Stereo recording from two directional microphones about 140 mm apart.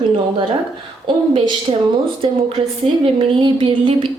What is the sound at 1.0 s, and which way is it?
A woman's voice, 35° right (ahead or behind).